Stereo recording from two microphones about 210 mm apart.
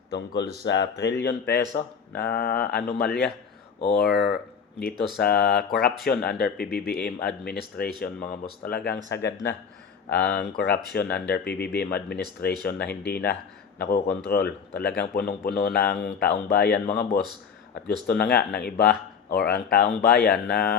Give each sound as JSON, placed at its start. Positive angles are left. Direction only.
{"t": 0.1, "sound": "a man's voice", "side_deg": 55}
{"t": 18.1, "sound": "speech", "side_deg": 50}